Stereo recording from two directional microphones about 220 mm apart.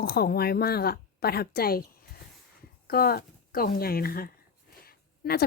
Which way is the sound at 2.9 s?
45° left (ahead or behind).